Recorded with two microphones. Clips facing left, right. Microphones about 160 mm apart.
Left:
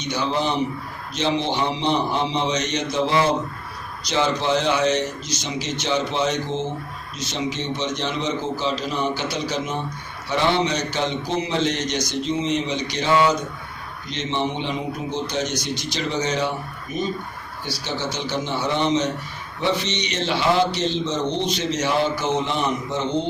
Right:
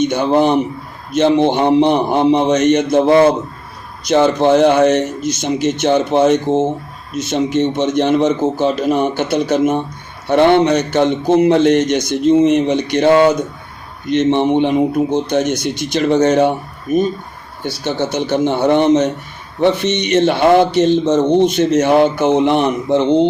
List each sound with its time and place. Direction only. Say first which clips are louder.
0.0 s a man's voice: right 11 dB; 55° right (ahead or behind)